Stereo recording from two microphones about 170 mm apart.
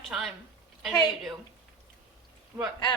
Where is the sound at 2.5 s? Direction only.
20° right (ahead or behind).